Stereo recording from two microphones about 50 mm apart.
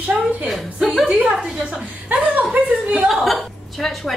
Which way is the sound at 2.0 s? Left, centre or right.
Right.